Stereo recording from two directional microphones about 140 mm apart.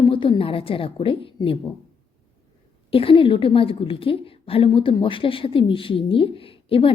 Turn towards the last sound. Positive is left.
turn(degrees=40)  # may be behind; listen again after turning